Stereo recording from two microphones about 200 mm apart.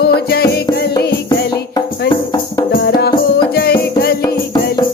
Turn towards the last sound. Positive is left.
turn(degrees=50)  # may be behind; listen again after turning